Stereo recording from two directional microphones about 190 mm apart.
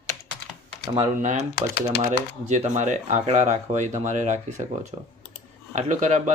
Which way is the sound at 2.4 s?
40° right (ahead or behind).